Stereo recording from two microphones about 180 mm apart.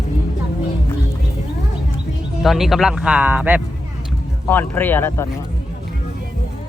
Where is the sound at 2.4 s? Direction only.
Centre (ahead or behind).